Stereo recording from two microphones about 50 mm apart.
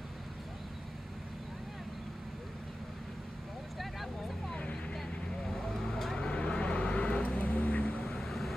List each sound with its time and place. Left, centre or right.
3.7 s vehicle: centre
6.1 s vehicle: centre
8.0 s vehicle: centre